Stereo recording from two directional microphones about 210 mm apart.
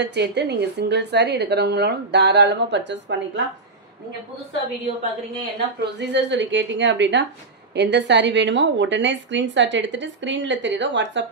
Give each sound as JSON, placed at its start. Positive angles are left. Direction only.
{"t": 0.0, "sound": "a woman's voice", "side_deg": -55}
{"t": 5.9, "sound": "a woman's voice", "side_deg": -55}